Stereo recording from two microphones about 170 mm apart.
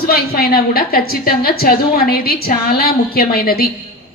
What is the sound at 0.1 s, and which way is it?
Speech, 65° left (ahead or behind).